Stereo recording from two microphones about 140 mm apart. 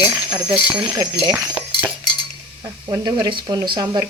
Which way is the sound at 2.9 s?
25° right (ahead or behind).